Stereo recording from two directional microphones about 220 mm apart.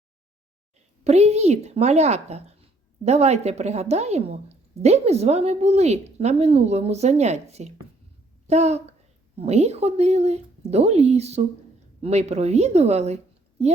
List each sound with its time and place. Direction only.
1.0 s a woman's voice: 30° right (ahead or behind)